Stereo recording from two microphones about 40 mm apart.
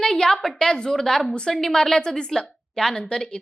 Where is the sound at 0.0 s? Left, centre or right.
Centre.